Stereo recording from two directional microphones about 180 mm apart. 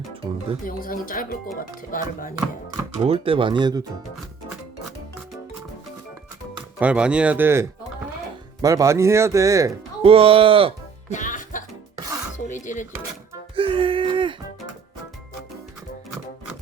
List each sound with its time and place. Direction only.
0.6 s speech: 50° left (ahead or behind)
3.0 s speech: 30° right (ahead or behind)
6.7 s speech: 5° right (ahead or behind)
10.0 s speech: 30° right (ahead or behind)
11.1 s music: 45° left (ahead or behind)
12.5 s dishes: 45° left (ahead or behind)
13.6 s a sound: 30° right (ahead or behind)